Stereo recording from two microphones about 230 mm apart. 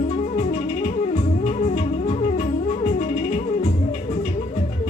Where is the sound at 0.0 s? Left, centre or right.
Left.